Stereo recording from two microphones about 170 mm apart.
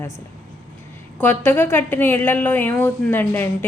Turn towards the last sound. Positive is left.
turn(degrees=10)  # may be behind; listen again after turning